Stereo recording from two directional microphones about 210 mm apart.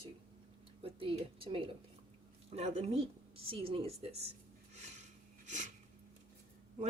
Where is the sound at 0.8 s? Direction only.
25° right (ahead or behind).